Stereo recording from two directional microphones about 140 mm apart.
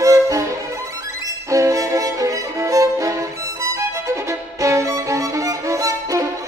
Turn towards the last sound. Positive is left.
turn(degrees=-20)  # may be behind; listen again after turning